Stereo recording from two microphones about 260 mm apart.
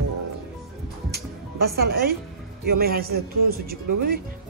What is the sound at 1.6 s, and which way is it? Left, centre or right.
Speech, right.